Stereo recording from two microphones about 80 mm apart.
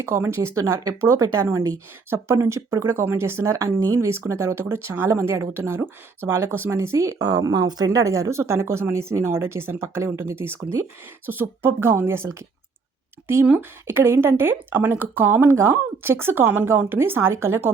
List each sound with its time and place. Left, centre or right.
0.0 s speech: right
7.2 s speech: right
13.6 s speech: right